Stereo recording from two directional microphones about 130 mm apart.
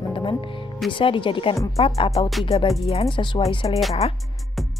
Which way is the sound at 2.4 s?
40° left (ahead or behind).